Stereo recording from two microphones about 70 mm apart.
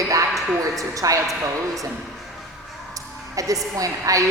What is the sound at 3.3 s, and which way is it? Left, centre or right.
Speech, right.